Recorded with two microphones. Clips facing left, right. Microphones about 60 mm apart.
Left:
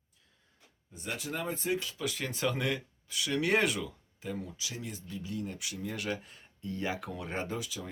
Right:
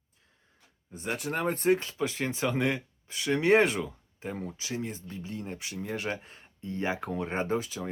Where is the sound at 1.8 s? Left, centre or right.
Right.